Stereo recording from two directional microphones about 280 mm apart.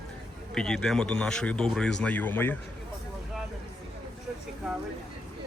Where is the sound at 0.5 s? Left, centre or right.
Centre.